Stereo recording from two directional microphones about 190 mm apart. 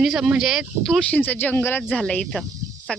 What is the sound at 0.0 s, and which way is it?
Speech, 5° right (ahead or behind).